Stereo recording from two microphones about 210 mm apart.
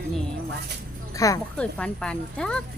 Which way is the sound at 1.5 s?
5° left (ahead or behind).